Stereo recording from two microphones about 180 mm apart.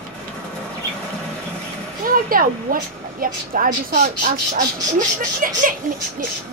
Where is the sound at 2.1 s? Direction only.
55° right (ahead or behind).